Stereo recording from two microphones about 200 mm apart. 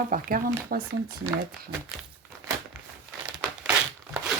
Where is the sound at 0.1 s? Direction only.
45° right (ahead or behind).